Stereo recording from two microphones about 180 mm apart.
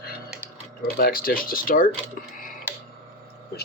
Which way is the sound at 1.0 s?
55° left (ahead or behind).